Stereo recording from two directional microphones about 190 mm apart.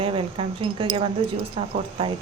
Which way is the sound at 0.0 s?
30° right (ahead or behind).